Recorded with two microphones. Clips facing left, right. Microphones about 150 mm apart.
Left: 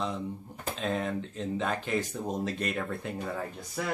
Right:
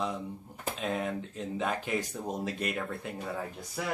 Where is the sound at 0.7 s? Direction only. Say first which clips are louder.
Left 2 dB; 10° right (ahead or behind).